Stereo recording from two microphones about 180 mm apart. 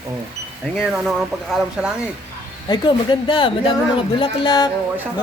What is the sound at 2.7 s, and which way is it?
A woman's voice, 25° left (ahead or behind).